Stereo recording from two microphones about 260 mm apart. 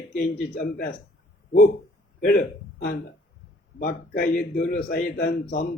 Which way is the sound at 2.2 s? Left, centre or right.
Left.